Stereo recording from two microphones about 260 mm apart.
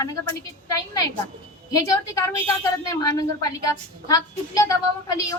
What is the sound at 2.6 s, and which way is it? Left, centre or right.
Speech, centre.